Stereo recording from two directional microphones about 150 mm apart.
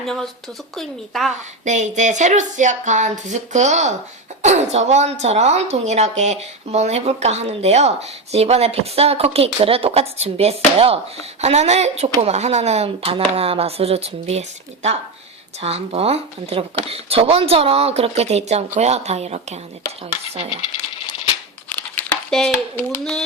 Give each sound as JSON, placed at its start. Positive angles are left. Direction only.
{"t": 0.0, "sound": "speech", "side_deg": 0}
{"t": 1.6, "sound": "speech", "side_deg": -50}
{"t": 21.7, "sound": "crumpling", "side_deg": 10}